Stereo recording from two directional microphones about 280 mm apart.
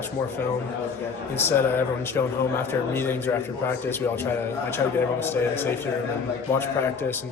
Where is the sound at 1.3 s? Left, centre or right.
Centre.